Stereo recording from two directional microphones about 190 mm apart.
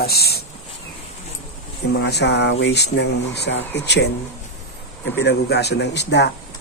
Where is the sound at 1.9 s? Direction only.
60° left (ahead or behind).